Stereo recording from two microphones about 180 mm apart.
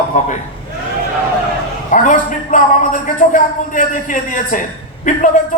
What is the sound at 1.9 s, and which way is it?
A man's voice, 45° left (ahead or behind).